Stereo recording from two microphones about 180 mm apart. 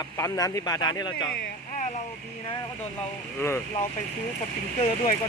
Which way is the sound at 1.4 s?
45° left (ahead or behind).